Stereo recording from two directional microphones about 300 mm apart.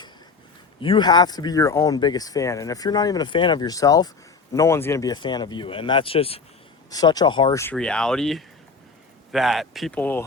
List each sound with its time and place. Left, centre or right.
0.8 s speech: centre